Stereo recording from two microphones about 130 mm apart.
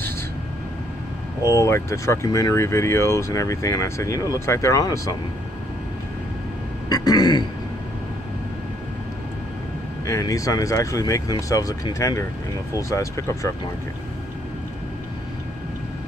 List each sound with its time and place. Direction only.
1.4 s speech: 25° left (ahead or behind)
6.9 s speech: 30° left (ahead or behind)
10.0 s speech: 25° left (ahead or behind)